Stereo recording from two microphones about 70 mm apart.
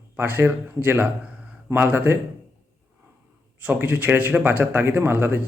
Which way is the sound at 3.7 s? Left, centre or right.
Right.